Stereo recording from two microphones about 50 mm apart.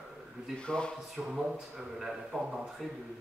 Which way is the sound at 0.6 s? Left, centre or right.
Centre.